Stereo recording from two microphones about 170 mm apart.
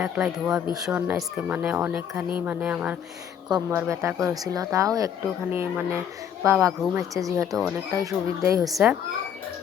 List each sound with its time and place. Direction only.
0.0 s speech: 5° right (ahead or behind)
8.6 s speech: 5° right (ahead or behind)